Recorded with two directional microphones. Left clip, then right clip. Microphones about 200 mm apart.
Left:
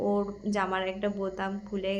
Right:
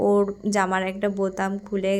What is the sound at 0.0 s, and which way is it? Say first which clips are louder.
A woman's voice: right 9 dB; 45° right (ahead or behind).